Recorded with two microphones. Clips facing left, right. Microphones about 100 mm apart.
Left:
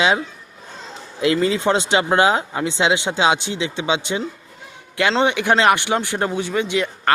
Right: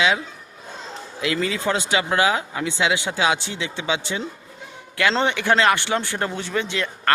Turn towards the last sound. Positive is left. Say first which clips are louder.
# left 5 dB
turn(degrees=15)  # may be behind; listen again after turning